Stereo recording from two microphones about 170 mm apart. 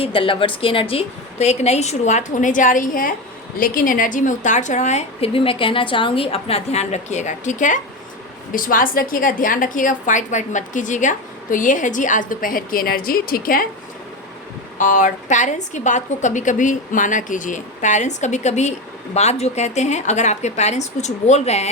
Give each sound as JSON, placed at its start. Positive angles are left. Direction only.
{"t": 0.0, "sound": "a woman's voice", "side_deg": 30}
{"t": 14.8, "sound": "a woman's voice", "side_deg": 45}